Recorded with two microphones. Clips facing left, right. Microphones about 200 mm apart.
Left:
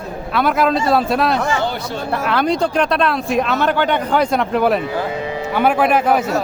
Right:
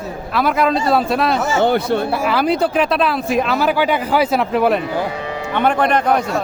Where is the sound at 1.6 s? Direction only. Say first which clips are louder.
Right 7 dB; 55° right (ahead or behind).